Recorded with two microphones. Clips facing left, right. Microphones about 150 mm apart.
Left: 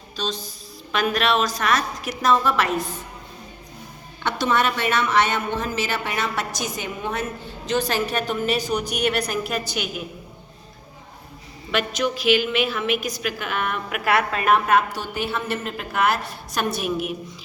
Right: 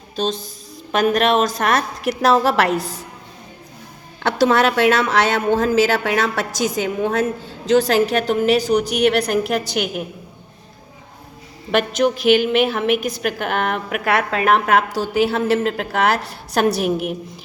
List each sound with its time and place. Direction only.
0.9 s a woman's voice: 45° right (ahead or behind); by 3.0 s 75° right (ahead or behind)
4.2 s a woman's voice: 90° right; by 10.0 s 65° right (ahead or behind)
11.7 s a woman's voice: 55° right (ahead or behind)
13.9 s a woman's voice: 50° right (ahead or behind)
14.3 s a woman's voice: 70° right (ahead or behind)